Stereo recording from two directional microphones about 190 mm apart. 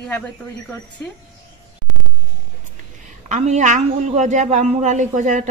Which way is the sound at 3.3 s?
40° right (ahead or behind).